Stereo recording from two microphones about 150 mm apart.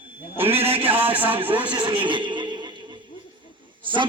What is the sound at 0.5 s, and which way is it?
Speech, 40° right (ahead or behind).